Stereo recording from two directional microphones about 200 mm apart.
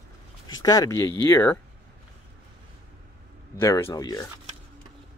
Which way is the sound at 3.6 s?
15° left (ahead or behind).